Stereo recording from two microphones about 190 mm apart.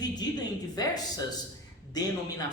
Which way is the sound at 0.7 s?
20° left (ahead or behind).